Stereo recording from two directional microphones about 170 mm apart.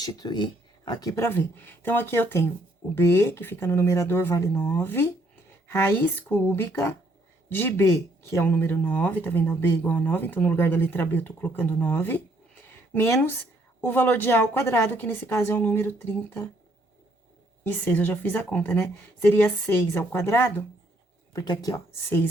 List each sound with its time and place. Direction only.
0.0 s speech: 25° left (ahead or behind)
17.6 s speech: 15° left (ahead or behind)